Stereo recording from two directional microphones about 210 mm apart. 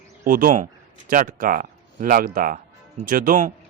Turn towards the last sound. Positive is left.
turn(degrees=-40)  # may be behind; listen again after turning